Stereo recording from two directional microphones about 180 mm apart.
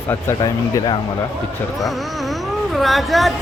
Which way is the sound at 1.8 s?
Centre (ahead or behind).